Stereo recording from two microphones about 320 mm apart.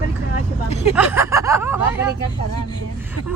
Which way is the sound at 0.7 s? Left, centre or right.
Centre.